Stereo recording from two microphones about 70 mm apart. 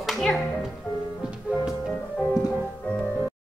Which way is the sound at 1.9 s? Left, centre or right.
Centre.